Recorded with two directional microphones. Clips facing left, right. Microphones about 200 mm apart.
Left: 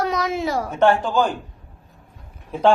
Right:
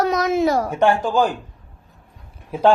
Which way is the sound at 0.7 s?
10° right (ahead or behind).